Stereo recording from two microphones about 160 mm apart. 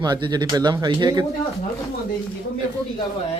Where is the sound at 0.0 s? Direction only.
25° right (ahead or behind).